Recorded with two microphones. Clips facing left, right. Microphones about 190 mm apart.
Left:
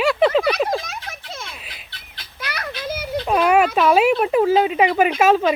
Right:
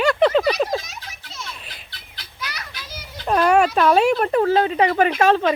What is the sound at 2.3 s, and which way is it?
Children playing, 55° left (ahead or behind).